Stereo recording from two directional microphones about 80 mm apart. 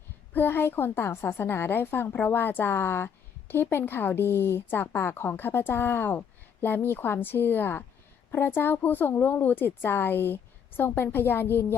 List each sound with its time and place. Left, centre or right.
0.3 s a woman's voice: left